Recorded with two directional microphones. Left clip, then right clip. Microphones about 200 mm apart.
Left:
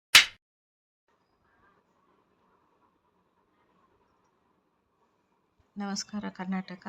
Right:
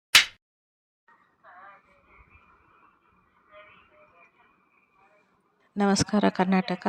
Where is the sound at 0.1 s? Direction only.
Centre (ahead or behind).